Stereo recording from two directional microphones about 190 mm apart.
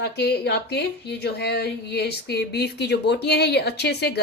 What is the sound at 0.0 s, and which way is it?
A woman's voice, 60° left (ahead or behind).